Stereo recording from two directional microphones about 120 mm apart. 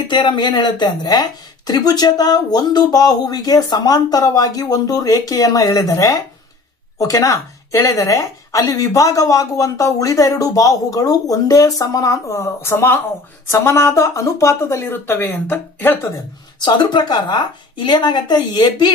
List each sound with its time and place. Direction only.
0.1 s speech: 40° left (ahead or behind); by 16.1 s 15° left (ahead or behind)
16.6 s speech: 35° left (ahead or behind)